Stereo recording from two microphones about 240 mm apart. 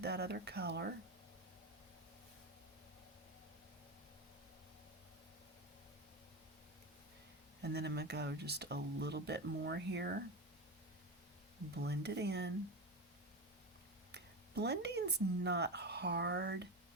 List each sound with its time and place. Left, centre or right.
0.0 s speech: right
7.6 s speech: right
11.7 s speech: right
14.1 s speech: right